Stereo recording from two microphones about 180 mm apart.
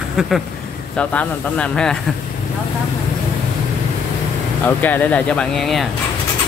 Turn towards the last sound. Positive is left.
turn(degrees=0)  # may be behind; listen again after turning